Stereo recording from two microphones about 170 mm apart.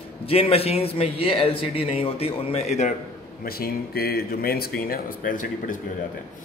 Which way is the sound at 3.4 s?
65° left (ahead or behind).